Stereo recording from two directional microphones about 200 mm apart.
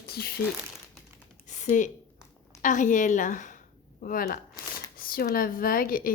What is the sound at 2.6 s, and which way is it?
A woman's voice, 40° left (ahead or behind).